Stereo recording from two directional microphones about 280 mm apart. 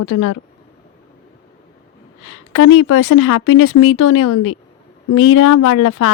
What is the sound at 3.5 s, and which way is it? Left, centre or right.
Speech, left.